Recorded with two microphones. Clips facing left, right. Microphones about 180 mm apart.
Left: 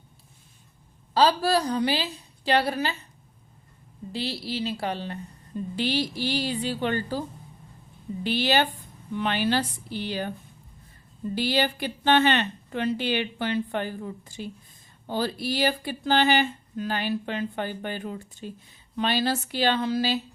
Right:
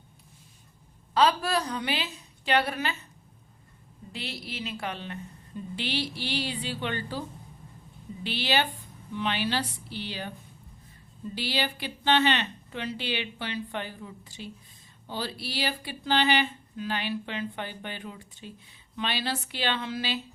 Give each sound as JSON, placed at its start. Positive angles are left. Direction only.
{"t": 1.1, "sound": "a woman's voice", "side_deg": 35}
{"t": 4.1, "sound": "a woman's voice", "side_deg": 30}
{"t": 11.3, "sound": "a woman's voice", "side_deg": 45}